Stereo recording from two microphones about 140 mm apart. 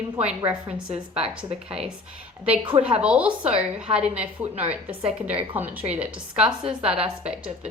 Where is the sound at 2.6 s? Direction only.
40° right (ahead or behind).